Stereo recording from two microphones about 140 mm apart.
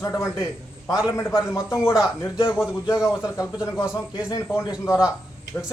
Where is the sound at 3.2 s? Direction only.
20° left (ahead or behind).